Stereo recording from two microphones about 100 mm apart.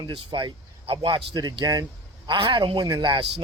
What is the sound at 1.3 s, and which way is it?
Speech, 45° right (ahead or behind).